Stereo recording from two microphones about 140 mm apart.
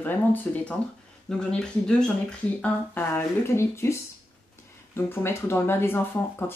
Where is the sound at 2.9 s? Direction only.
15° left (ahead or behind).